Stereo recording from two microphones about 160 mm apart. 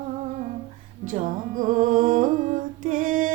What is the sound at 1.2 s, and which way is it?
Music, 55° right (ahead or behind).